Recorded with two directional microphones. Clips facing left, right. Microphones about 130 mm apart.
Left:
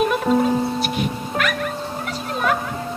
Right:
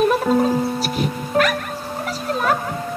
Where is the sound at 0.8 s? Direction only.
40° right (ahead or behind).